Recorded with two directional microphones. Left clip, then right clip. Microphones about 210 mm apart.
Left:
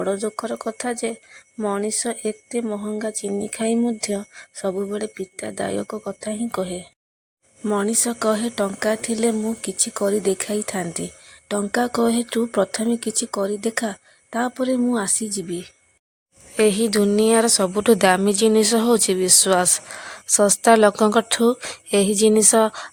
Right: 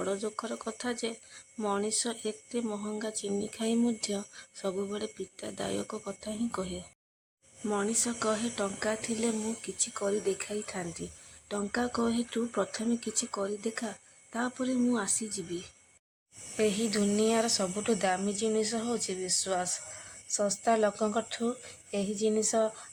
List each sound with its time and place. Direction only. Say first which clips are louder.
0.0 s speech: left 10 dB; 30° left (ahead or behind)
7.6 s a woman's voice: left 9 dB; 40° left (ahead or behind)